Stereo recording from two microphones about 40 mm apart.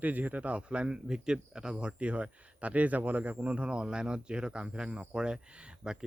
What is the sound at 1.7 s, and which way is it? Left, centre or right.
Speech, right.